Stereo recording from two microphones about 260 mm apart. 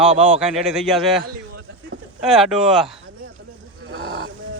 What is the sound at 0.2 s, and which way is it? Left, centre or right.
Speech, centre.